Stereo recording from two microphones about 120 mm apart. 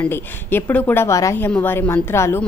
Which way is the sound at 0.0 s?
20° left (ahead or behind).